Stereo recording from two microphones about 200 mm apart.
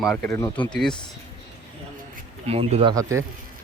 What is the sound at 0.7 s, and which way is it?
Speech, 5° left (ahead or behind).